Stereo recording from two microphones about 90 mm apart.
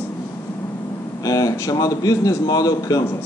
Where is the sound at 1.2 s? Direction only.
40° left (ahead or behind).